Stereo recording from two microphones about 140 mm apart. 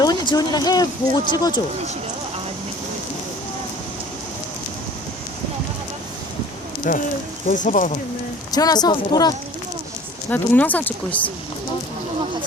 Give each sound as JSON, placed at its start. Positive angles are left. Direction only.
{"t": 0.0, "sound": "speech", "side_deg": 30}
{"t": 6.9, "sound": "speech", "side_deg": 70}
{"t": 8.5, "sound": "speech", "side_deg": 30}
{"t": 10.2, "sound": "speech", "side_deg": 10}